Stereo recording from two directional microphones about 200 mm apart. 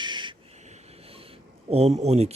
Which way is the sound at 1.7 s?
35° right (ahead or behind).